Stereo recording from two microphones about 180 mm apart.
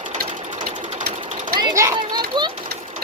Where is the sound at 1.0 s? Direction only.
60° right (ahead or behind).